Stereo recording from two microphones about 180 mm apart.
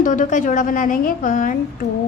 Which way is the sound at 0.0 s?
45° left (ahead or behind).